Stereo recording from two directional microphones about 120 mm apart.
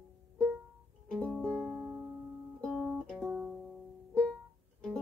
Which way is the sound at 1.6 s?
15° right (ahead or behind).